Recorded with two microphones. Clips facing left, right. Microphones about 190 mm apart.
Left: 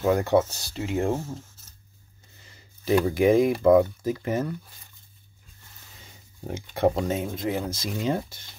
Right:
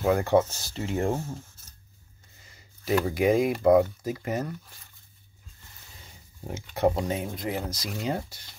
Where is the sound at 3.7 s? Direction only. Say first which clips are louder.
Even; 50° left (ahead or behind).